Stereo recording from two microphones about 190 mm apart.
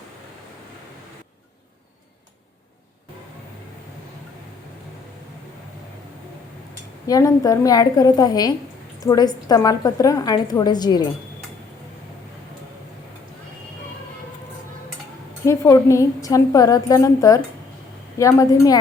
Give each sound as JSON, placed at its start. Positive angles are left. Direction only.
{"t": 7.1, "sound": "a woman's voice", "side_deg": 20}
{"t": 15.4, "sound": "a woman's voice", "side_deg": 15}